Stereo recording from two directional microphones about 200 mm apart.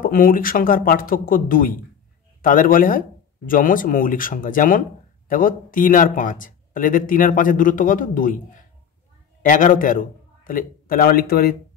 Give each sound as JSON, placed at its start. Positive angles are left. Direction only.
{"t": 0.0, "sound": "a man's voice", "side_deg": 45}